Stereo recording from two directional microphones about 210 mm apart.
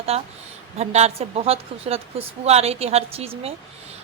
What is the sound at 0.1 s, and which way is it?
A woman's voice, 30° right (ahead or behind).